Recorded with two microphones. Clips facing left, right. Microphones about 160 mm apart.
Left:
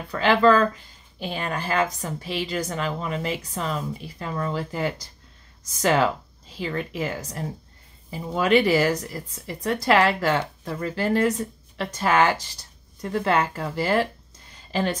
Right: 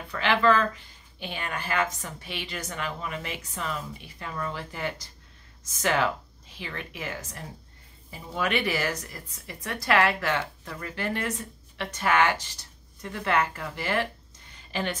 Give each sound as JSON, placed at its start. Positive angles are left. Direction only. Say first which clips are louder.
{"t": 0.1, "sound": "a woman's voice", "louder": "left 5 dB", "side_deg": 35}